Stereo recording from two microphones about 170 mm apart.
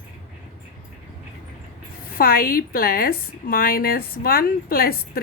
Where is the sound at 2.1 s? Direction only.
60° left (ahead or behind).